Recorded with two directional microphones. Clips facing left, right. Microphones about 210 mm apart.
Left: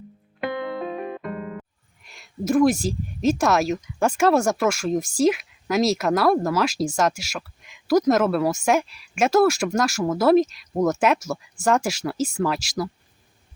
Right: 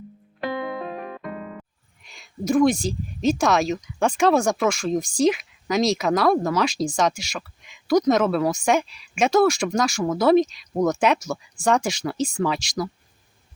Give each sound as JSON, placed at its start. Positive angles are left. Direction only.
{"t": 2.0, "sound": "speech", "side_deg": 5}